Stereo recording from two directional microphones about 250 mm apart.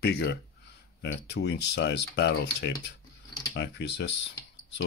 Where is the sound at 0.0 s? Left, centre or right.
Left.